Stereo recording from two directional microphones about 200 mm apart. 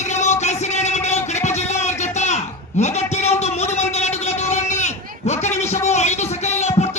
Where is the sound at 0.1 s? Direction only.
35° left (ahead or behind).